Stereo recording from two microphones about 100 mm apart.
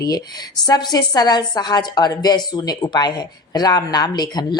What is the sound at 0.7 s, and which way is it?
A woman's voice, 45° left (ahead or behind).